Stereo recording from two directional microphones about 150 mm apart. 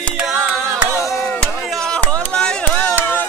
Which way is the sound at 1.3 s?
5° left (ahead or behind).